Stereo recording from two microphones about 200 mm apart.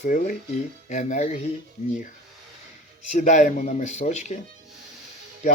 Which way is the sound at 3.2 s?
40° left (ahead or behind).